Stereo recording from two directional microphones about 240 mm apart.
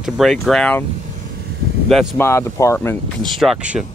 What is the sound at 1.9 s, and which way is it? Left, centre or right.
Speech, centre.